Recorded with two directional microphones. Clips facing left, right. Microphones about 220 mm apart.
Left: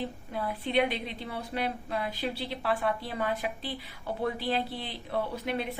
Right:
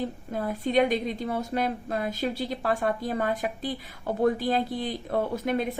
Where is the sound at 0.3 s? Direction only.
45° right (ahead or behind).